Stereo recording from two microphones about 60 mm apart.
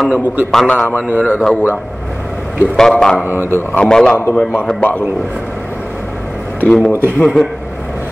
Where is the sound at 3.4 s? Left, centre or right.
Left.